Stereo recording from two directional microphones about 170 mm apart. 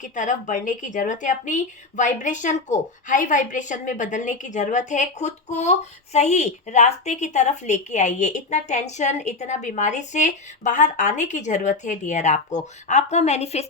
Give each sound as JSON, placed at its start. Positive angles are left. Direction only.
{"t": 0.0, "sound": "a woman's voice", "side_deg": 45}